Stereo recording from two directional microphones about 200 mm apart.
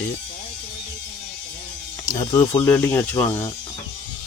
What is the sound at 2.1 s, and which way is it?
Speech, 20° left (ahead or behind).